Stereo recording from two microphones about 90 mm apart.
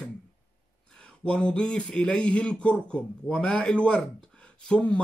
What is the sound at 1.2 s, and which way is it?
Speech, 10° left (ahead or behind).